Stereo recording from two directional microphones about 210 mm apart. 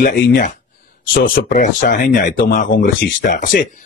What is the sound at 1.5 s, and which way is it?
Speech, 40° left (ahead or behind).